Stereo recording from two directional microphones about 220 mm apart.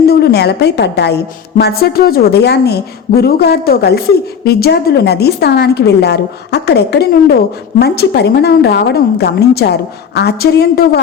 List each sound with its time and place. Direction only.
0.0 s a woman's voice: 45° left (ahead or behind)